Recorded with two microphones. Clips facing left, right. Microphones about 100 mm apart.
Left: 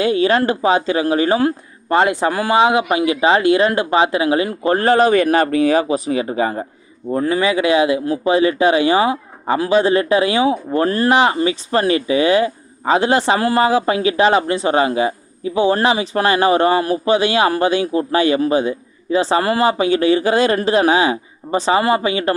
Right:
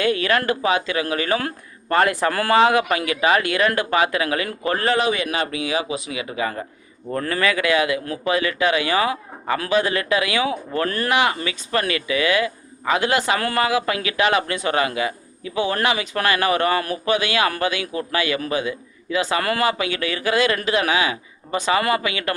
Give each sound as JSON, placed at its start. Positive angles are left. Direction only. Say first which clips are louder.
{"t": 0.0, "sound": "speech", "louder": "left 5 dB", "side_deg": 25}
{"t": 7.1, "sound": "speech", "louder": "left 5 dB", "side_deg": 15}